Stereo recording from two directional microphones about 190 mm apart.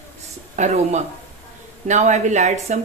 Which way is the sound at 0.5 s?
35° right (ahead or behind).